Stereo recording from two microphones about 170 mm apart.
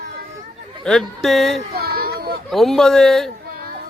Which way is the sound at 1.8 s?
65° right (ahead or behind).